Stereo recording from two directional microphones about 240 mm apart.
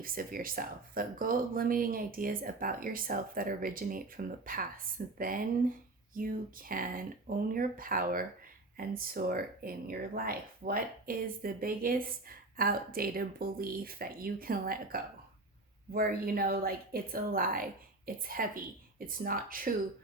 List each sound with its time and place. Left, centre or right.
0.0 s speech: right